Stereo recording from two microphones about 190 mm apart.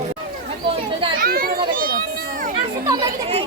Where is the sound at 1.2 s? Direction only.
50° right (ahead or behind).